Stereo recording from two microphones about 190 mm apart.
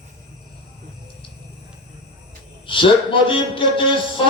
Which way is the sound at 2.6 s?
25° left (ahead or behind).